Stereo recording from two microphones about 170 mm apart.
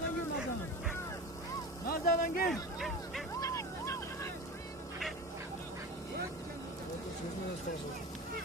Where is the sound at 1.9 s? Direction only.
60° left (ahead or behind).